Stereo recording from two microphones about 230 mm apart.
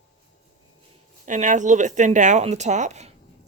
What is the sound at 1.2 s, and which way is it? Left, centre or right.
Speech, right.